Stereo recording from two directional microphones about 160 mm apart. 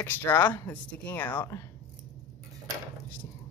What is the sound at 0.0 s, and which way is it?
Speech, 15° left (ahead or behind).